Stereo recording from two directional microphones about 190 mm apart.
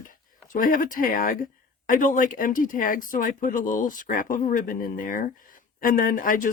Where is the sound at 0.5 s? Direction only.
45° left (ahead or behind).